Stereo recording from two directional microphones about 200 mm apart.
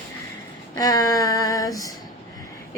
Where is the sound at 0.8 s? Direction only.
20° left (ahead or behind).